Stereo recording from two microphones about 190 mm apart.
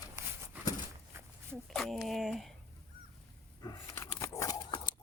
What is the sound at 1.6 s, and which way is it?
Speech, centre (ahead or behind).